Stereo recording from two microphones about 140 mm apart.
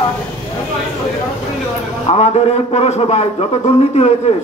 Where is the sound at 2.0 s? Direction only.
50° left (ahead or behind).